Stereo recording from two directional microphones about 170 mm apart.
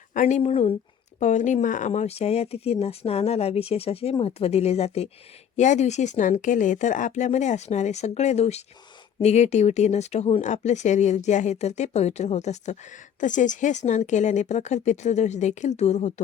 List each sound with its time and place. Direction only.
0.1 s speech: 45° left (ahead or behind)